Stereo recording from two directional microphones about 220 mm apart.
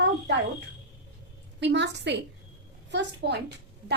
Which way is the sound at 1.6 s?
55° right (ahead or behind).